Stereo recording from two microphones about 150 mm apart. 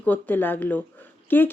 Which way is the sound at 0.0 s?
10° left (ahead or behind).